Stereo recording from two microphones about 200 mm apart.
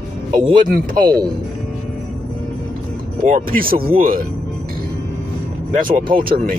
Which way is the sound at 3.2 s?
40° right (ahead or behind).